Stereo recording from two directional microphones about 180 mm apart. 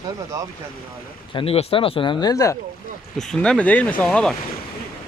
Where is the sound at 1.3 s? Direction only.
35° left (ahead or behind).